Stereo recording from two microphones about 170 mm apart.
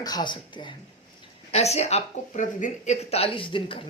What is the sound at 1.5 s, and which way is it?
Speech, 40° left (ahead or behind).